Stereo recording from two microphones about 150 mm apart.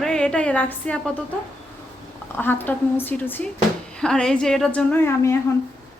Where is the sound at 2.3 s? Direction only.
15° left (ahead or behind).